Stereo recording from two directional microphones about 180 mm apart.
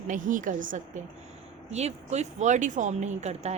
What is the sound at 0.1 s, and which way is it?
A woman's voice, 45° right (ahead or behind).